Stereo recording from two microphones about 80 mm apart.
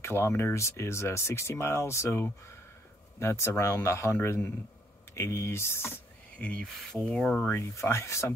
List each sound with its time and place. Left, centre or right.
0.0 s speech: left
6.3 s speech: centre
7.3 s speech: left